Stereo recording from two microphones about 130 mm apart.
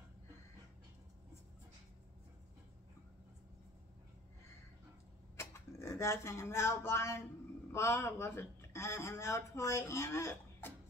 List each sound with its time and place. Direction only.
5.4 s speech: 20° left (ahead or behind)